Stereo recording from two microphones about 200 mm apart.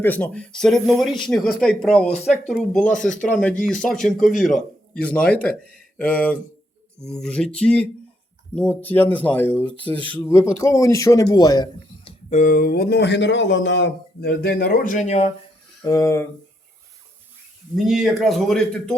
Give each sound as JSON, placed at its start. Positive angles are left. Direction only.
{"t": 0.0, "sound": "speech", "side_deg": 5}
{"t": 2.2, "sound": "speech", "side_deg": 35}
{"t": 2.5, "sound": "a man's voice", "side_deg": 5}
{"t": 9.8, "sound": "speech", "side_deg": -25}
{"t": 10.1, "sound": "a man's voice", "side_deg": 10}
{"t": 12.3, "sound": "speech", "side_deg": 40}
{"t": 15.8, "sound": "a man's voice", "side_deg": 20}
{"t": 17.7, "sound": "speech", "side_deg": 0}